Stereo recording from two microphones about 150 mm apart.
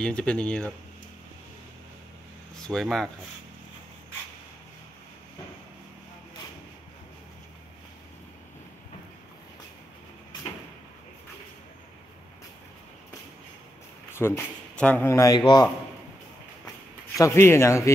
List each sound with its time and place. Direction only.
0.0 s speech: 5° left (ahead or behind)
2.6 s speech: 5° left (ahead or behind)
14.1 s speech: 15° left (ahead or behind)
17.2 s speech: 20° left (ahead or behind)